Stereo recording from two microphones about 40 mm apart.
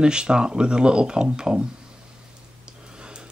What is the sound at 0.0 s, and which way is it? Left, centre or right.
Speech, right.